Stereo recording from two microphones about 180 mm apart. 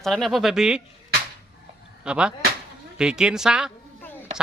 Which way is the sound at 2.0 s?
5° right (ahead or behind).